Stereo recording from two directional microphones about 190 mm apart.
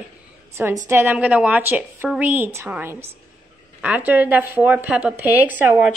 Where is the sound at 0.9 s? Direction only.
10° right (ahead or behind).